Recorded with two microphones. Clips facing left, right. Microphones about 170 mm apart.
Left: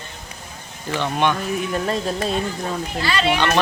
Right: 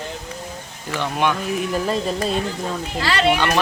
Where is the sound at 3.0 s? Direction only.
80° right.